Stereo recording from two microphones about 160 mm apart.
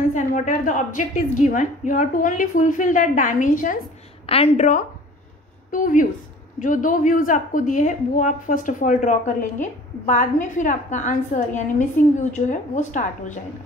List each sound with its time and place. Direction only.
0.1 s a woman's voice: 55° left (ahead or behind)
4.3 s a woman's voice: 40° left (ahead or behind)
5.7 s a woman's voice: 55° left (ahead or behind)